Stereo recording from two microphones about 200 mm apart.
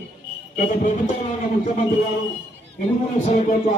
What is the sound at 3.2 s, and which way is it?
Speech, 40° left (ahead or behind).